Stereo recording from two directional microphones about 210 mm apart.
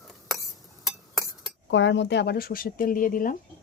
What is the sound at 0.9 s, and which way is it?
Chink, centre (ahead or behind).